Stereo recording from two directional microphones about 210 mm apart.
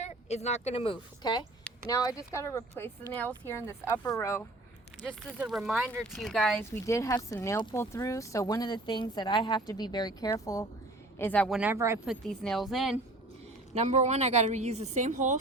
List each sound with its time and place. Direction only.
0.0 s speech: 30° left (ahead or behind); by 4.4 s 15° left (ahead or behind)
5.0 s speech: centre (ahead or behind)
12.0 s speech: centre (ahead or behind)
13.7 s a woman's voice: 35° right (ahead or behind)